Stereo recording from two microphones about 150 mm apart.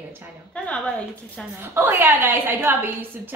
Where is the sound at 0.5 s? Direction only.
5° left (ahead or behind).